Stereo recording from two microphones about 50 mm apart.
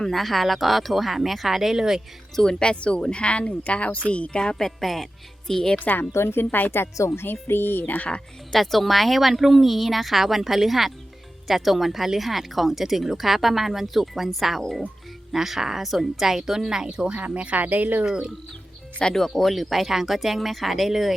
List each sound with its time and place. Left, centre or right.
0.0 s speech: centre
2.3 s speech: centre
6.1 s speech: left
8.5 s a woman's voice: centre; by 18.0 s right
18.0 s a woman's voice: centre
19.1 s speech: centre